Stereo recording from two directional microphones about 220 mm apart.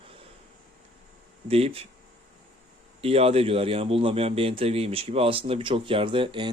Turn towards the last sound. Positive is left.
turn(degrees=-20)  # may be behind; listen again after turning